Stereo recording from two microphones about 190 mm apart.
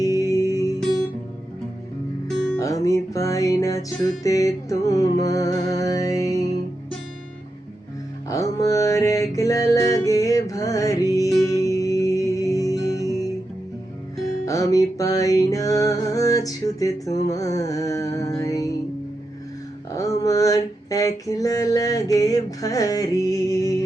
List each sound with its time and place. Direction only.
0.0 s music: 20° left (ahead or behind)
2.6 s music: 15° left (ahead or behind)
8.3 s music: 15° left (ahead or behind)
14.4 s music: 15° left (ahead or behind)
20.2 s a sound: 15° left (ahead or behind)